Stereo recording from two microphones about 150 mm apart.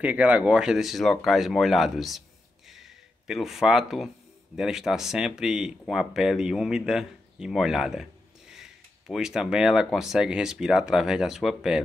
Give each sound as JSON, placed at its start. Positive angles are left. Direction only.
{"t": 0.0, "sound": "speech", "side_deg": -10}
{"t": 2.7, "sound": "a sound", "side_deg": 0}
{"t": 4.6, "sound": "speech", "side_deg": -5}